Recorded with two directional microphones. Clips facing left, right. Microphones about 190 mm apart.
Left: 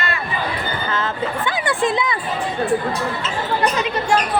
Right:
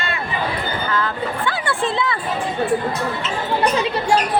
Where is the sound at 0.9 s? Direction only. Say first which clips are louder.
Left 1 dB; 20° left (ahead or behind).